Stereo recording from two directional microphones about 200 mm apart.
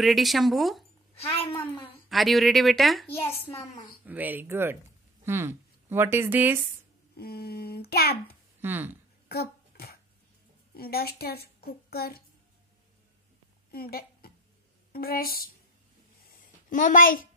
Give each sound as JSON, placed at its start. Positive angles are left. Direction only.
{"t": 0.0, "sound": "a woman's voice", "side_deg": 0}
{"t": 1.1, "sound": "a woman's voice", "side_deg": 30}
{"t": 1.8, "sound": "a woman's voice", "side_deg": 0}
{"t": 3.1, "sound": "a woman's voice", "side_deg": 10}
{"t": 4.0, "sound": "speech", "side_deg": -10}
{"t": 7.2, "sound": "a woman's voice", "side_deg": 50}
{"t": 8.5, "sound": "speech", "side_deg": -10}
{"t": 9.3, "sound": "a sound", "side_deg": 50}
{"t": 10.8, "sound": "a woman's voice", "side_deg": 50}
{"t": 13.7, "sound": "a sound", "side_deg": 50}
{"t": 14.9, "sound": "a woman's voice", "side_deg": 50}
{"t": 16.3, "sound": "a sound", "side_deg": 40}